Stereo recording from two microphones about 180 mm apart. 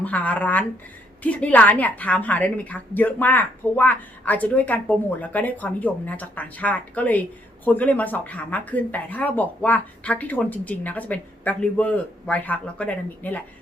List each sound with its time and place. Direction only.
0.0 s a woman's voice: 10° left (ahead or behind)